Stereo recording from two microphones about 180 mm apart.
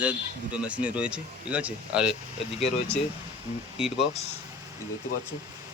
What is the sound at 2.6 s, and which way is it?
Speech, 35° left (ahead or behind).